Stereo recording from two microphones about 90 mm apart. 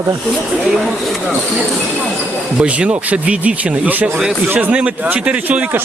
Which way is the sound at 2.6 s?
15° right (ahead or behind).